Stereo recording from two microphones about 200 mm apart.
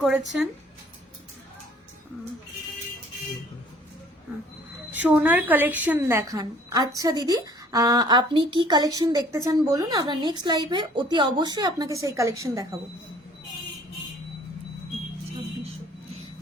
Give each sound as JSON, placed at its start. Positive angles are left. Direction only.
{"t": 0.0, "sound": "speech", "side_deg": 0}
{"t": 4.9, "sound": "a woman's voice", "side_deg": -10}